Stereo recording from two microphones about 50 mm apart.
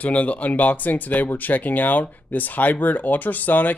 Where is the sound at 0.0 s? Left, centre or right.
Left.